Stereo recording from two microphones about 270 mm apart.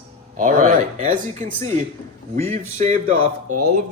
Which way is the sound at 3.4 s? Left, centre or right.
Right.